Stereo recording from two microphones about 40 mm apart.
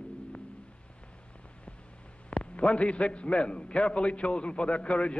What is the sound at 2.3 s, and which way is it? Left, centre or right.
A man's voice, left.